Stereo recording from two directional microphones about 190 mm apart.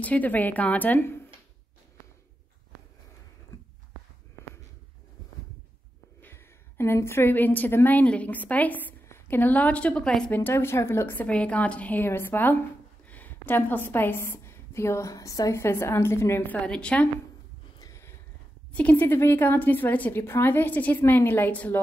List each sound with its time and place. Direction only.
0.0 s a woman's voice: 10° left (ahead or behind)
6.2 s a woman's voice: 10° left (ahead or behind)
17.7 s a sound: 15° left (ahead or behind)
18.7 s a woman's voice: 5° left (ahead or behind)